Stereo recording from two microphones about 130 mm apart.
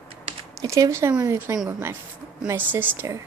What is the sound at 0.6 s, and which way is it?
A woman's voice, 25° right (ahead or behind).